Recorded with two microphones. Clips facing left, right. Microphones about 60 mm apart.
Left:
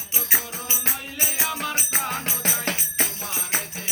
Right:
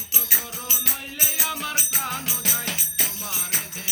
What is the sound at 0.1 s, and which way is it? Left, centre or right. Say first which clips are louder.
Music: left 4 dB; left.